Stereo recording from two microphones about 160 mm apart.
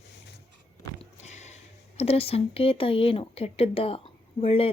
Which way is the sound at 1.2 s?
45° left (ahead or behind).